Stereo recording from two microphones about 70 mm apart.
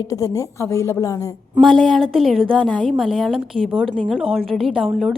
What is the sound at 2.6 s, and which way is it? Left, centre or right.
Speech, centre.